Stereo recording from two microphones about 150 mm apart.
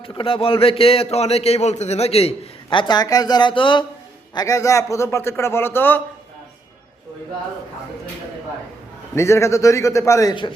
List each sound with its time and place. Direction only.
0.0 s a man's voice: 35° left (ahead or behind)
4.4 s a man's voice: 20° left (ahead or behind)
9.1 s a man's voice: 20° left (ahead or behind)